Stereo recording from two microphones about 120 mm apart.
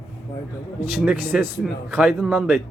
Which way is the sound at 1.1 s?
10° right (ahead or behind).